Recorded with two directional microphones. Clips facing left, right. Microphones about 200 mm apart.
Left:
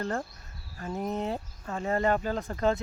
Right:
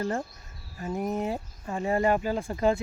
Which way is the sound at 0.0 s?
10° right (ahead or behind).